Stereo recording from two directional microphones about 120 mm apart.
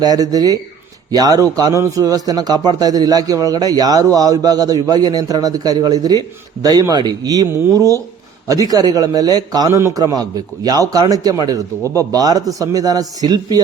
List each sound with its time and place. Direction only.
0.0 s a man's voice: 30° right (ahead or behind)